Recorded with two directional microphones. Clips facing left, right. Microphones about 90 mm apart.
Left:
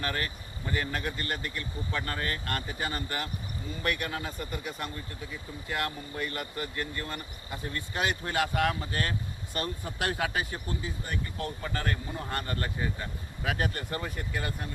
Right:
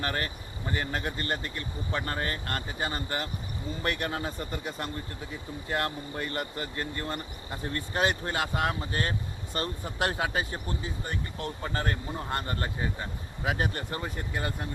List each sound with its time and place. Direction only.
0.0 s speech: 30° right (ahead or behind)
8.3 s speech: 25° right (ahead or behind)